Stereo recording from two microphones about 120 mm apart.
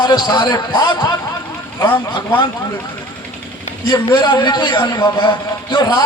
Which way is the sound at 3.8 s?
40° left (ahead or behind).